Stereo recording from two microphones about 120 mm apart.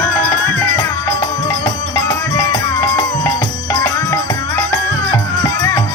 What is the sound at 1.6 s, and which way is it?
Music, 30° left (ahead or behind).